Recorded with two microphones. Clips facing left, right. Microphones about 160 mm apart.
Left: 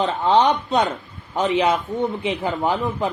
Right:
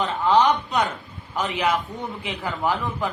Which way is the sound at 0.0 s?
25° left (ahead or behind).